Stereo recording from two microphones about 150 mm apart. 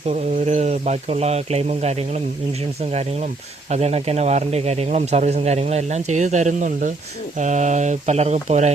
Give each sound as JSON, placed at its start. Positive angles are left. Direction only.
{"t": 0.1, "sound": "speech", "side_deg": -50}
{"t": 3.7, "sound": "speech", "side_deg": -45}